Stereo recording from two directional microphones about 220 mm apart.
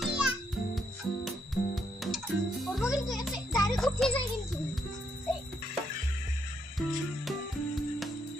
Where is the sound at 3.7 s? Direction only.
Centre (ahead or behind).